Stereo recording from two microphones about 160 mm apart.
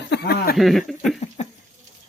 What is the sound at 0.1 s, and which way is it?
Speech, 85° left.